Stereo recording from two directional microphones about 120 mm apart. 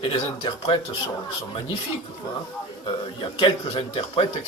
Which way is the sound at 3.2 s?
45° left (ahead or behind).